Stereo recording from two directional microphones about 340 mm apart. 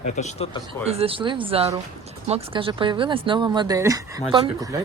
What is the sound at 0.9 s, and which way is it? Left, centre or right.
Speech, centre.